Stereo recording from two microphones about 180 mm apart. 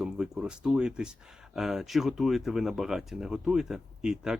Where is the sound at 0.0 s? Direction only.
5° right (ahead or behind).